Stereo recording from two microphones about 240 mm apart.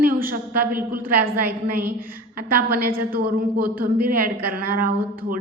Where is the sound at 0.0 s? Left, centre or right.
Right.